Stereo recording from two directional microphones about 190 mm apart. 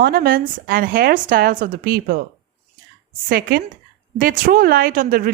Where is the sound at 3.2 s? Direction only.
50° right (ahead or behind).